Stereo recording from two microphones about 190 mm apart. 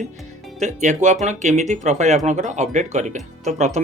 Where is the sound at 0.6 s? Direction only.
40° right (ahead or behind).